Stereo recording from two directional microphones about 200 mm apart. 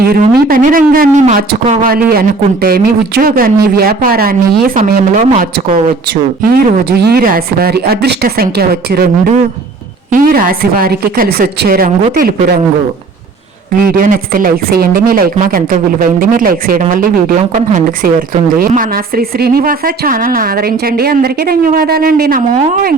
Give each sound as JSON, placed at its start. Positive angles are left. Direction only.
{"t": 0.0, "sound": "a woman's voice", "side_deg": -50}
{"t": 10.1, "sound": "a woman's voice", "side_deg": -45}
{"t": 13.9, "sound": "a woman's voice", "side_deg": -45}